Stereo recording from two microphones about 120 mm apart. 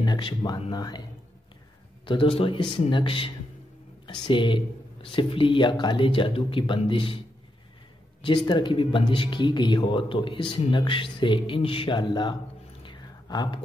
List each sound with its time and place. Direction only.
0.0 s speech: 40° left (ahead or behind)
2.0 s speech: 45° left (ahead or behind)
8.2 s speech: 40° left (ahead or behind)
12.8 s a sound: 40° left (ahead or behind)